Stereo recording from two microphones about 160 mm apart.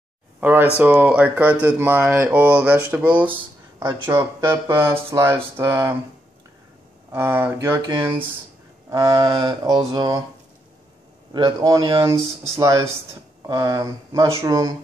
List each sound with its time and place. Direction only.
0.4 s speech: 10° right (ahead or behind)
7.1 s speech: 15° right (ahead or behind)
11.3 s speech: 25° right (ahead or behind)